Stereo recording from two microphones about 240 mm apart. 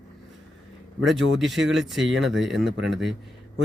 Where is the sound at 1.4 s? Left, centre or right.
Centre.